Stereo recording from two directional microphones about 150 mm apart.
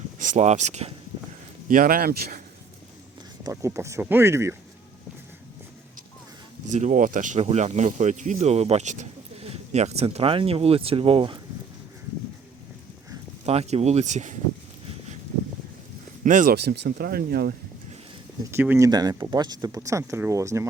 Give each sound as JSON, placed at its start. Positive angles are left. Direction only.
{"t": 0.2, "sound": "speech", "side_deg": -55}
{"t": 1.6, "sound": "speech", "side_deg": -65}
{"t": 3.4, "sound": "speech", "side_deg": -20}
{"t": 6.7, "sound": "speech", "side_deg": -55}
{"t": 13.4, "sound": "speech", "side_deg": -45}
{"t": 16.2, "sound": "speech", "side_deg": -60}
{"t": 18.5, "sound": "speech", "side_deg": -15}
{"t": 18.9, "sound": "speech", "side_deg": -25}